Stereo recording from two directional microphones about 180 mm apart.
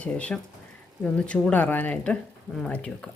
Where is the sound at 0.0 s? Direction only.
5° left (ahead or behind).